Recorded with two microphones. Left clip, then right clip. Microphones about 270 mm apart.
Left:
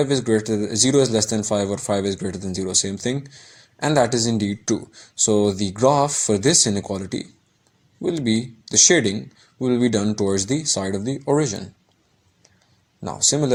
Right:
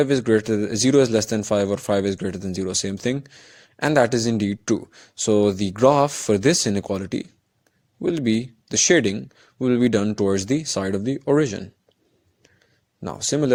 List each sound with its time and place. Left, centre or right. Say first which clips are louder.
0.0 s speech: right 1 dB; right
13.0 s speech: left 2 dB; right